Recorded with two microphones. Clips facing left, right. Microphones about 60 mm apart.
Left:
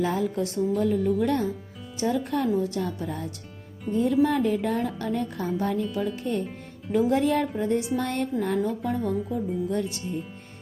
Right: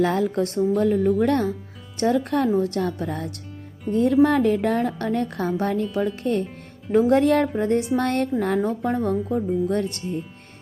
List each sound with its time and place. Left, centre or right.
0.0 s a woman's voice: right
0.8 s a woman's voice: right
8.6 s speech: right